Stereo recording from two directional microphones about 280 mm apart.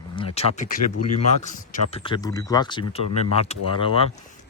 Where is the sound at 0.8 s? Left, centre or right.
Left.